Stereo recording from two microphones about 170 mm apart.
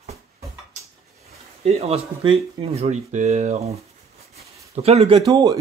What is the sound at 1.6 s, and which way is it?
Speech, 40° right (ahead or behind).